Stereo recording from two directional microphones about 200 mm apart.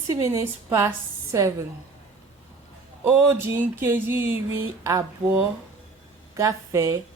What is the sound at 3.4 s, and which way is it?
Speech, 10° right (ahead or behind).